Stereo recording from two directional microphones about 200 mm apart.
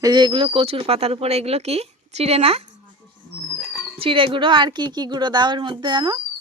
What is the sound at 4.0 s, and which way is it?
A woman's voice, 25° right (ahead or behind).